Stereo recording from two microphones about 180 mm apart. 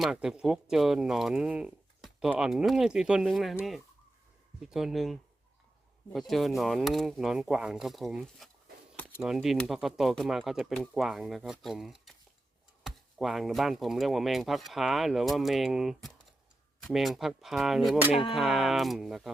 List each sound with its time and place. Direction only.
0.0 s speech: 5° right (ahead or behind)
18.1 s speech: 30° left (ahead or behind)
18.3 s speech: centre (ahead or behind)